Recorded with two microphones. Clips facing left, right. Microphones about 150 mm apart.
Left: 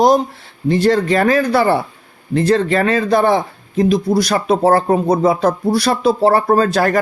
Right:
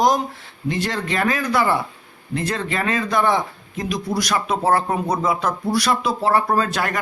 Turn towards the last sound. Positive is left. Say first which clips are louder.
# left 8 dB
turn(degrees=35)  # may be behind; listen again after turning